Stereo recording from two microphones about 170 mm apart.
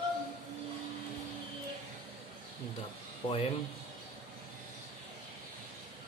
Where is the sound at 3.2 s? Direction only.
35° left (ahead or behind).